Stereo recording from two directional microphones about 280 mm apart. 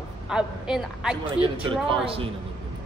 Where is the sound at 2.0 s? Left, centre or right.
Centre.